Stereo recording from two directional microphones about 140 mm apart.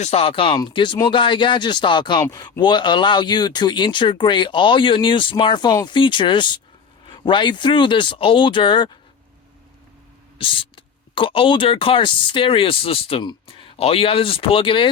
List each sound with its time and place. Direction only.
0.0 s speech: 45° left (ahead or behind)
10.3 s speech: 40° left (ahead or behind)